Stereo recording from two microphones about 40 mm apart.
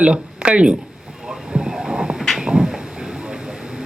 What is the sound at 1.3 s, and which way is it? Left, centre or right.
Train, centre.